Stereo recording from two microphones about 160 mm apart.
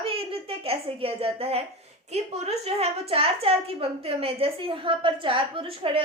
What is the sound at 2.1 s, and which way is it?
A child's voice, 40° right (ahead or behind).